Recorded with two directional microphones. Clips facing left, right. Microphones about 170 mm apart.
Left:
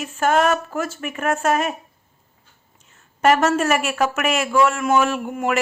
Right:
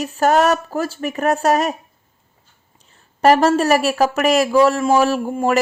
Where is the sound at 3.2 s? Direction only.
35° right (ahead or behind).